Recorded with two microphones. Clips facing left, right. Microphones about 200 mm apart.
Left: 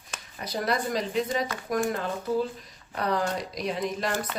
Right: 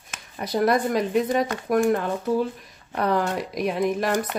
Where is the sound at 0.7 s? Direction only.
55° right (ahead or behind).